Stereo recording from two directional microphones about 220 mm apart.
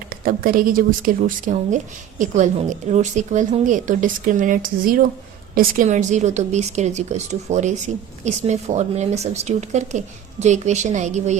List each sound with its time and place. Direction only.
0.3 s speech: 40° right (ahead or behind)